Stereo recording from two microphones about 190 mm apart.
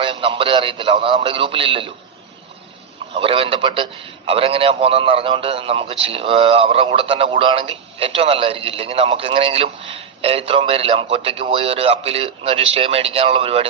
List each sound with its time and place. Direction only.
0.0 s a man's voice: 25° right (ahead or behind)
3.2 s a man's voice: 30° right (ahead or behind)